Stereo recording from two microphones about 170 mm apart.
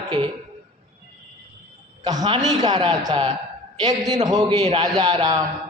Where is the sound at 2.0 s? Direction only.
25° right (ahead or behind).